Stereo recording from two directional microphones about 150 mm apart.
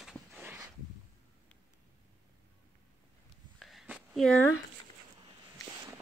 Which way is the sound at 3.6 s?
5° right (ahead or behind).